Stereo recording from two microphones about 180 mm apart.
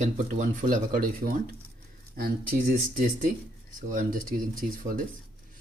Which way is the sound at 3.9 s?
45° right (ahead or behind).